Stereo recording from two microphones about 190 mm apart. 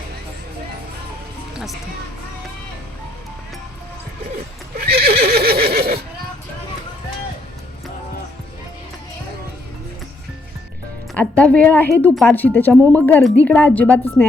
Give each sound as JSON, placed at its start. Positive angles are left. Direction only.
{"t": 4.8, "sound": "neigh", "side_deg": -55}
{"t": 11.1, "sound": "a woman's voice", "side_deg": 5}